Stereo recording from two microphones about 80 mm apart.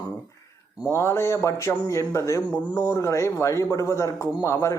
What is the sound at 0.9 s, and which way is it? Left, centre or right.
Speech, left.